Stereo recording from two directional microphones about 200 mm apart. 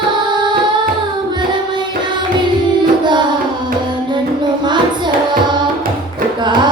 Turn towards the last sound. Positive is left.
turn(degrees=-20)  # may be behind; listen again after turning